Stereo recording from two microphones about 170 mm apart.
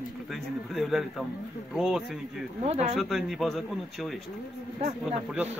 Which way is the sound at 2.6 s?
40° right (ahead or behind).